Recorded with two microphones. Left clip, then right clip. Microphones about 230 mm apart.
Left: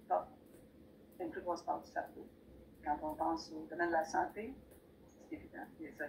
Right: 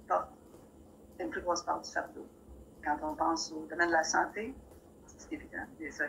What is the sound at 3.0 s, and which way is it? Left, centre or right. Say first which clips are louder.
A woman's voice: right 6 dB; right.